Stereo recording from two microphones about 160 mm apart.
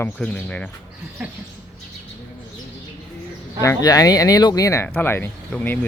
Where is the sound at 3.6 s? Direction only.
20° left (ahead or behind).